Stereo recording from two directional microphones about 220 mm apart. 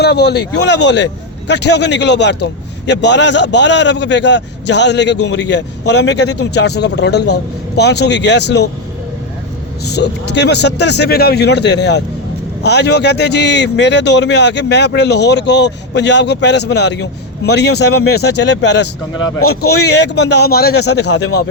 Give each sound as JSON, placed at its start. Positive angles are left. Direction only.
{"t": 0.0, "sound": "speech", "side_deg": 50}
{"t": 9.8, "sound": "speech", "side_deg": 50}